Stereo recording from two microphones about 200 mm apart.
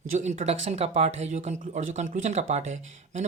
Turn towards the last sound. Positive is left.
turn(degrees=-35)  # may be behind; listen again after turning